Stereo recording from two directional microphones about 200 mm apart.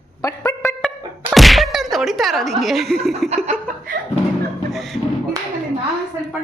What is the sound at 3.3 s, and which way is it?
Laughter, 35° right (ahead or behind).